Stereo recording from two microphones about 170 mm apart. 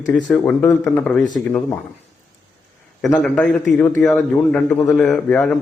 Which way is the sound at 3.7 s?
10° left (ahead or behind).